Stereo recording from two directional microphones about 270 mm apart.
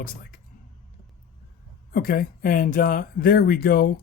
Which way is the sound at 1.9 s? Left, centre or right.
Left.